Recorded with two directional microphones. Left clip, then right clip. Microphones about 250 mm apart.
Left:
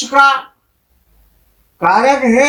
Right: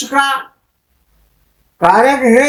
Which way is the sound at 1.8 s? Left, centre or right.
Right.